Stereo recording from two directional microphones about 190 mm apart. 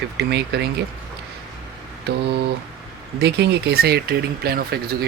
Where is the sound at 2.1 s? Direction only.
60° right (ahead or behind).